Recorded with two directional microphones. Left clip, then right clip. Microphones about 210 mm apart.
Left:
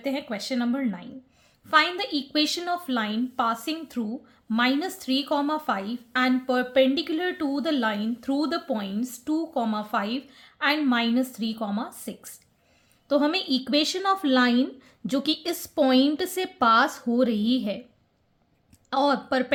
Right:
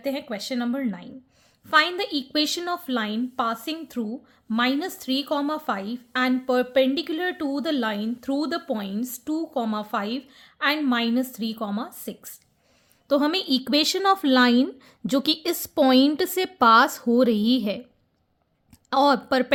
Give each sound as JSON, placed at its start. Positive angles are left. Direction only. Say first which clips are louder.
{"t": 0.0, "sound": "a woman's voice", "louder": "right 1 dB", "side_deg": -25}
{"t": 18.9, "sound": "speech", "louder": "right 4 dB", "side_deg": -35}